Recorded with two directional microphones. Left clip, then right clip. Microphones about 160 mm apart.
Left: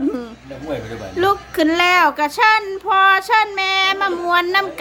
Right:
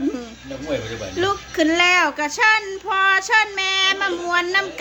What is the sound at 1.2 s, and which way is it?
Child singing, 20° left (ahead or behind).